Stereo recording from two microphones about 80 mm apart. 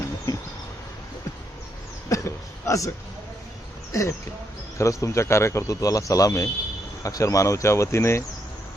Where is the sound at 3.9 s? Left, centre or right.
Left.